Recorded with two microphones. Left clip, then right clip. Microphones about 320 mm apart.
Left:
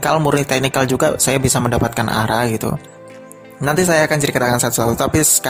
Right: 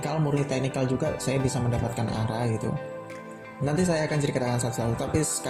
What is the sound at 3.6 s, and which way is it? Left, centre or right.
Speech, left.